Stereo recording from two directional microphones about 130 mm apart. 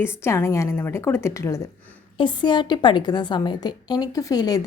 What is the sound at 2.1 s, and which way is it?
A woman's voice, 35° left (ahead or behind).